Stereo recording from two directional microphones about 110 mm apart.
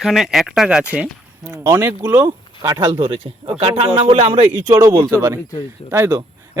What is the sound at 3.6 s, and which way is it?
Speech, 60° right (ahead or behind).